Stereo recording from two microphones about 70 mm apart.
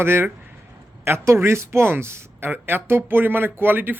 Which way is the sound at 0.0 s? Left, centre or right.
Right.